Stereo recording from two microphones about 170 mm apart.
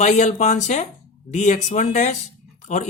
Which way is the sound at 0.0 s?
45° left (ahead or behind).